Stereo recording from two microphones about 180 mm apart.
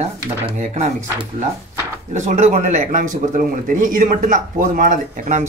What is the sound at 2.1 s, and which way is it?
Speech, 40° right (ahead or behind).